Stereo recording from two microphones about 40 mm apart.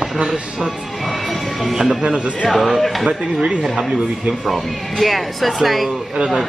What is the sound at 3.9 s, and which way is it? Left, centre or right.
Speech, right.